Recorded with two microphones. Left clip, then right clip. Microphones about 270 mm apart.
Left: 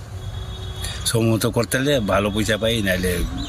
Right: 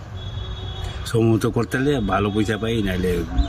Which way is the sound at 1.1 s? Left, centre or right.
Centre.